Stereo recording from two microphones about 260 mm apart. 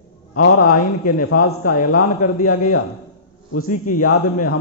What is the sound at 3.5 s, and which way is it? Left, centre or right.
Speech, left.